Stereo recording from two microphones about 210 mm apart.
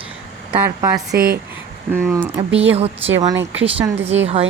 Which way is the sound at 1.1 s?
45° right (ahead or behind).